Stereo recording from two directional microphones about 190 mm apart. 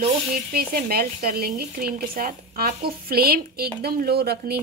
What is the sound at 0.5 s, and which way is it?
Speech, 50° right (ahead or behind).